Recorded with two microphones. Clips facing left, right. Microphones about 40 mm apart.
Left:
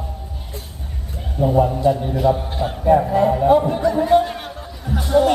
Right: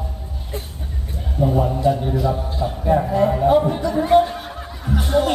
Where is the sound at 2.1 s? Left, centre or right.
Left.